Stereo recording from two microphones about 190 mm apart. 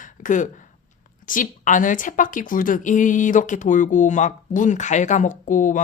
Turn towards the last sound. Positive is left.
turn(degrees=45)  # may be behind; listen again after turning